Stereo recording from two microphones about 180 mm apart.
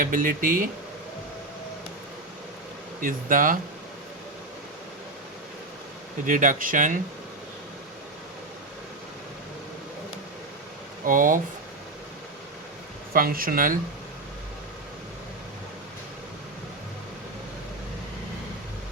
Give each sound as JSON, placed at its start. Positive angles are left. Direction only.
{"t": 0.0, "sound": "speech", "side_deg": -50}
{"t": 3.0, "sound": "speech", "side_deg": -50}
{"t": 6.2, "sound": "speech", "side_deg": -45}
{"t": 11.0, "sound": "speech", "side_deg": -50}
{"t": 13.1, "sound": "speech", "side_deg": -50}